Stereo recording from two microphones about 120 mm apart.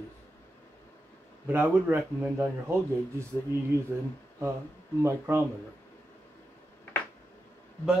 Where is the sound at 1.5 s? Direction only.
20° right (ahead or behind).